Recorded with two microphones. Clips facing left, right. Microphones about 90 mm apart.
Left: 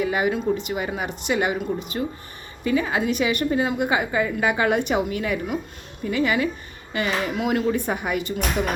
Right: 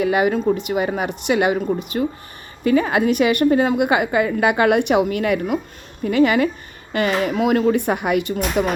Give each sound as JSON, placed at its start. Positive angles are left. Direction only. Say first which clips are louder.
{"t": 0.0, "sound": "a woman's voice", "louder": "right 5 dB", "side_deg": -55}